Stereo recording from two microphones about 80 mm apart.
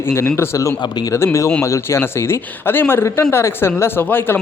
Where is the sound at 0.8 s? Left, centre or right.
Left.